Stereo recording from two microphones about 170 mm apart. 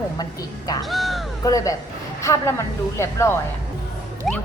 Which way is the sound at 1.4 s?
20° left (ahead or behind).